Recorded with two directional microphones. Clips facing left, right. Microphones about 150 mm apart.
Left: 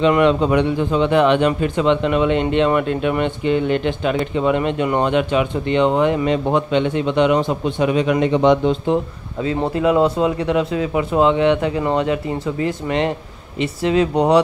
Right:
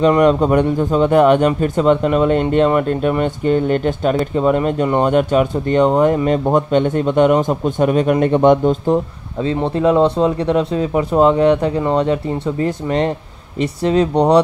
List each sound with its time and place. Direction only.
0.0 s a man's voice: 40° right (ahead or behind)
9.8 s speech: 5° left (ahead or behind)
10.2 s speech: 35° right (ahead or behind)